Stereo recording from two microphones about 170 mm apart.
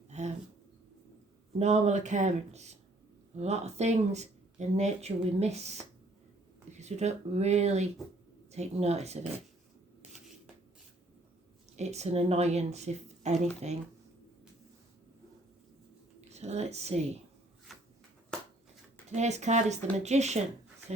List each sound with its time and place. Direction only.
0.1 s a sound: 40° right (ahead or behind)
1.5 s speech: 40° right (ahead or behind)
10.0 s shuffling cards: centre (ahead or behind)
11.8 s speech: 40° right (ahead or behind)
16.3 s speech: 40° right (ahead or behind)
17.7 s a sound: centre (ahead or behind)
19.1 s speech: 40° right (ahead or behind)